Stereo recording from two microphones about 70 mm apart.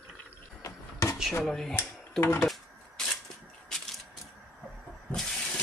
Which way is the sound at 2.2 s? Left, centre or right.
Left.